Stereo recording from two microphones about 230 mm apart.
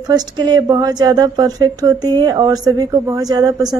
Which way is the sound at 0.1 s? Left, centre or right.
Centre.